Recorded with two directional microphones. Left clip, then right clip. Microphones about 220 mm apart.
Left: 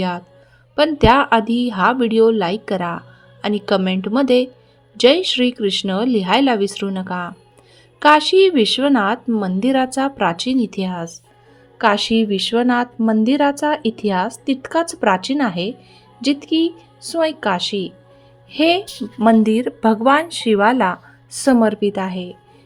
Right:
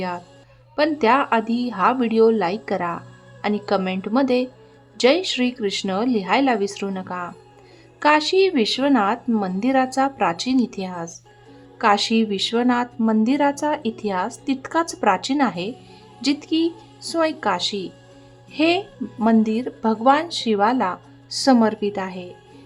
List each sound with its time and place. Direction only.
0.8 s a woman's voice: 15° left (ahead or behind)